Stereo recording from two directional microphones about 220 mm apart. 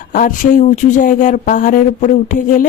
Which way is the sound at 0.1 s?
40° left (ahead or behind).